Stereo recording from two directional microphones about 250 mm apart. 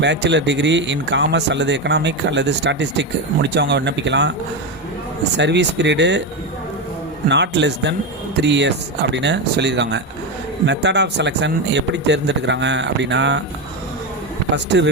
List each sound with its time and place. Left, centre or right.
0.0 s speech: right
5.4 s speech: right
7.3 s speech: right
14.5 s speech: right